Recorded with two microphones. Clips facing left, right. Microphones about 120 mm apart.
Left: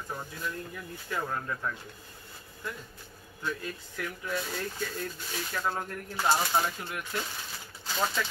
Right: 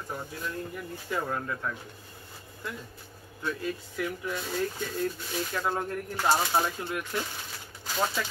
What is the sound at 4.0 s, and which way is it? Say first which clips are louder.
Speech: even; 10° right (ahead or behind).